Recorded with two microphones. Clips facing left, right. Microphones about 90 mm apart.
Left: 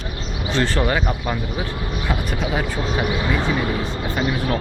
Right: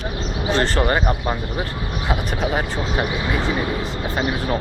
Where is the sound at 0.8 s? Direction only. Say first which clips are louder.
Right 2 dB; 20° right (ahead or behind).